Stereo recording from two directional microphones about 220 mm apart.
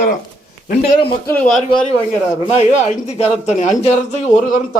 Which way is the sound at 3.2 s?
30° left (ahead or behind).